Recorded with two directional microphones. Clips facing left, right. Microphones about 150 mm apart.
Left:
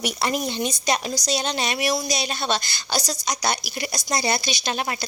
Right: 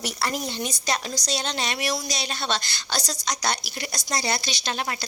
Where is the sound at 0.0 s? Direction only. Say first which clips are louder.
Left 4 dB; 15° left (ahead or behind).